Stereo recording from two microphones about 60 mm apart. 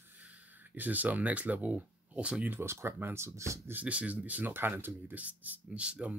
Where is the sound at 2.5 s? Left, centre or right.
Right.